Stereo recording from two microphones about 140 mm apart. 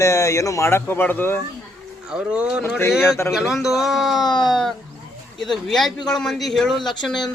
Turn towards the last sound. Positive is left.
turn(degrees=0)  # may be behind; listen again after turning